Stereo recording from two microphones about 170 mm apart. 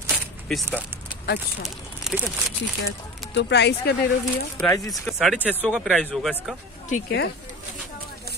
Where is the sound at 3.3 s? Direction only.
85° left.